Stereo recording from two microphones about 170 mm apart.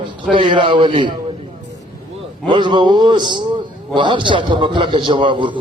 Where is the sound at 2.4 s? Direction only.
30° right (ahead or behind).